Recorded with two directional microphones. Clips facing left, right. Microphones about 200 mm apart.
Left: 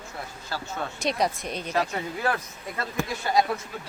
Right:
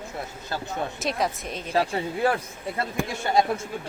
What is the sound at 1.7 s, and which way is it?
Speech, 30° right (ahead or behind).